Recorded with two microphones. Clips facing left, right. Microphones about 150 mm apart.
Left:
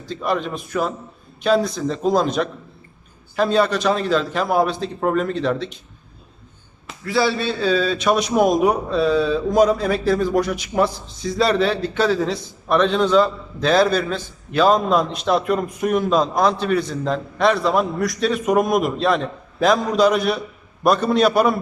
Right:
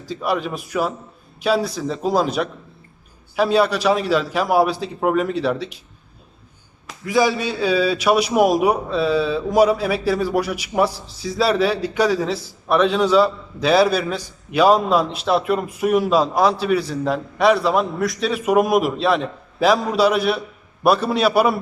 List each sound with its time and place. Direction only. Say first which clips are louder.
0.0 s a man's voice: even; 10° right (ahead or behind)
7.0 s a man's voice: right 1 dB; 15° right (ahead or behind)